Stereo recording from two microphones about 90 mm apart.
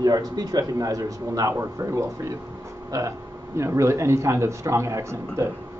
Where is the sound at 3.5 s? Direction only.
35° right (ahead or behind).